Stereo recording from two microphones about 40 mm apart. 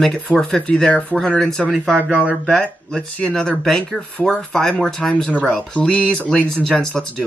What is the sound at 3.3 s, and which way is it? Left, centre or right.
Speech, centre.